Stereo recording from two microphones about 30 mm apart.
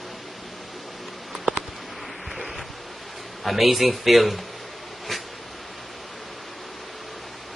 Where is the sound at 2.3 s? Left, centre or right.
Centre.